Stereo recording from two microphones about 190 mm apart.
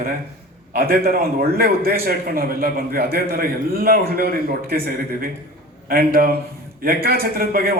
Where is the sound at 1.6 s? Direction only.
50° right (ahead or behind).